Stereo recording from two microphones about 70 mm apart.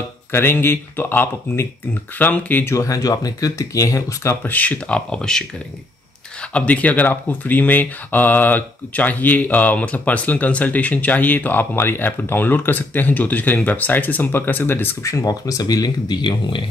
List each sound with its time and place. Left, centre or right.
0.3 s speech: left
2.7 s speech: left
4.3 s speech: left
6.5 s speech: centre
15.2 s speech: left